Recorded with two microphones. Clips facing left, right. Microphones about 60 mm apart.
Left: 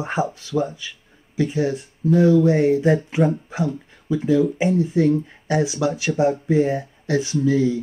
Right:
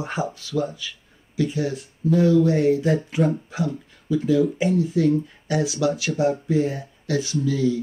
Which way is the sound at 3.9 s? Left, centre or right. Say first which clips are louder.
Left 1 dB; left.